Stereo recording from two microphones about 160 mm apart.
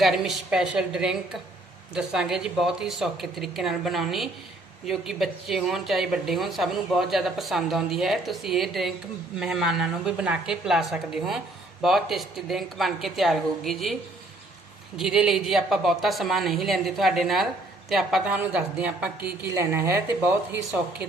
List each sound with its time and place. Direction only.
0.0 s speech: centre (ahead or behind)
14.9 s speech: 5° right (ahead or behind)